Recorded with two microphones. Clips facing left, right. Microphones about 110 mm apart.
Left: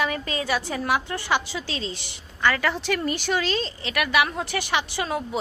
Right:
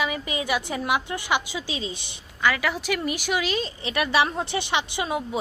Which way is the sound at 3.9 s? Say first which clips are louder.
Right 1 dB; 30° right (ahead or behind).